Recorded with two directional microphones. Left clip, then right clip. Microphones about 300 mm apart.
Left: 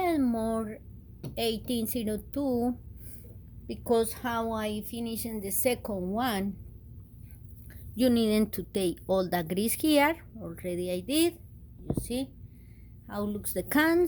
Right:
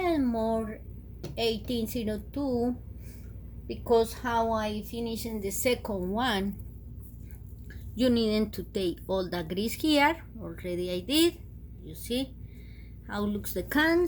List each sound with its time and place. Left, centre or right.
0.0 s a sound: left
1.4 s a woman's voice: left
7.9 s speech: left